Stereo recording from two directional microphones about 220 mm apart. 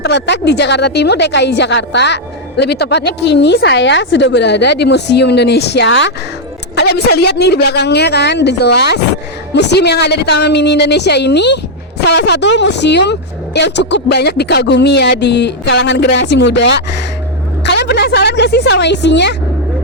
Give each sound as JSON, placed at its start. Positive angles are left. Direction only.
{"t": 0.0, "sound": "a woman's voice", "side_deg": 50}